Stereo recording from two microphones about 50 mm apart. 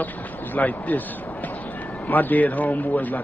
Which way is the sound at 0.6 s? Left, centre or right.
Left.